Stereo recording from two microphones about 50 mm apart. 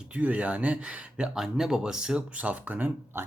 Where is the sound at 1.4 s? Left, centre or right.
Centre.